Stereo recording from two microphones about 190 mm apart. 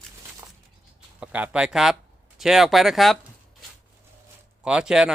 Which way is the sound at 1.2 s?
5° right (ahead or behind).